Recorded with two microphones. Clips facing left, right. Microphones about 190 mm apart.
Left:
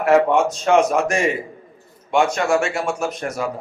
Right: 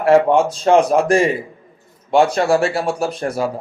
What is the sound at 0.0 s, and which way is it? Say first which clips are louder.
A man's voice: right 3 dB; 30° right (ahead or behind).